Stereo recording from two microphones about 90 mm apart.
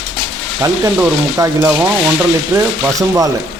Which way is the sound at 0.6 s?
30° right (ahead or behind).